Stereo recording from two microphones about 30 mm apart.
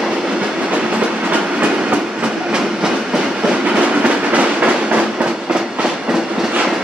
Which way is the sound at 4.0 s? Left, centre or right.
Right.